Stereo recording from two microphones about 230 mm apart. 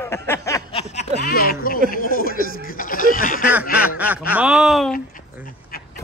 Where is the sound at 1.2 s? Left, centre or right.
Left.